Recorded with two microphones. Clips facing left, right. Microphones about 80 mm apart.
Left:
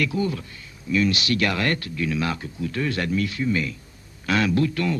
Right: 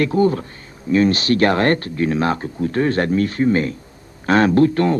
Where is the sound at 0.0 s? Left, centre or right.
Right.